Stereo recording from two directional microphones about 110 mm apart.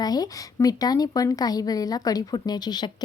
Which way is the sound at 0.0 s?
35° left (ahead or behind).